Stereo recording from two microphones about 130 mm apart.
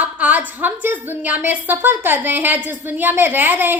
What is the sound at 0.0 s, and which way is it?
A woman's voice, 10° right (ahead or behind).